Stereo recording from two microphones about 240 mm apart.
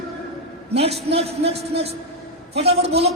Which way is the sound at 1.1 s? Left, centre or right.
Right.